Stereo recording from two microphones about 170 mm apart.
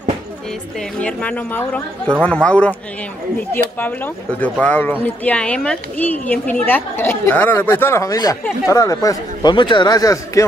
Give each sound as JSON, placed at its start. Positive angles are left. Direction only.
{"t": 1.0, "sound": "a woman's voice", "side_deg": 10}
{"t": 3.8, "sound": "a woman's voice", "side_deg": 10}